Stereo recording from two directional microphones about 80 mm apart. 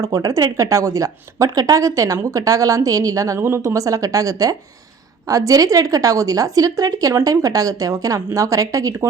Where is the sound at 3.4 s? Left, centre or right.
Right.